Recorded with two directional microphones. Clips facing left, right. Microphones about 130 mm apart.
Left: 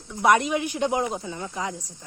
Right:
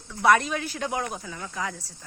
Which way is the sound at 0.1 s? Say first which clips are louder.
Left 1 dB; 20° left (ahead or behind).